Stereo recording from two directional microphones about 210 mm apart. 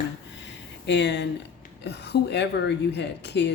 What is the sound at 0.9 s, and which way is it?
A woman's voice, 55° left (ahead or behind).